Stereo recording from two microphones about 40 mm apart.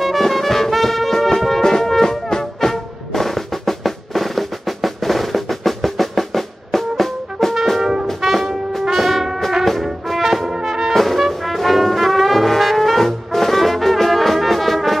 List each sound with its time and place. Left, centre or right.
0.0 s music: centre
2.7 s drum: centre
7.8 s music: centre
8.2 s music: centre
10.0 s brass instrument: centre